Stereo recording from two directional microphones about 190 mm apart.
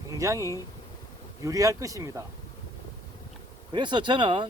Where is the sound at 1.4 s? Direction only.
15° right (ahead or behind).